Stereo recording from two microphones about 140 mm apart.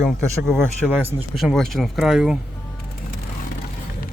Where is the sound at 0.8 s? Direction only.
5° left (ahead or behind).